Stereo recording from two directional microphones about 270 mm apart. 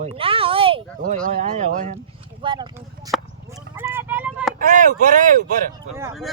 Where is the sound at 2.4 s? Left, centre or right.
Centre.